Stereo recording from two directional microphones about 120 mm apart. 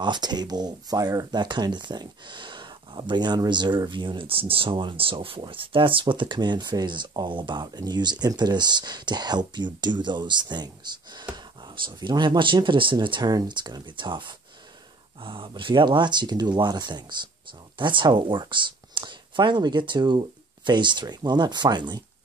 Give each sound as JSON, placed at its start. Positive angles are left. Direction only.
{"t": 0.0, "sound": "speech", "side_deg": -40}